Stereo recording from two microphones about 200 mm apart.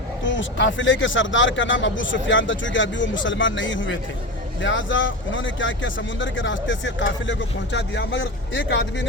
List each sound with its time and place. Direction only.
0.3 s speech: 65° left (ahead or behind)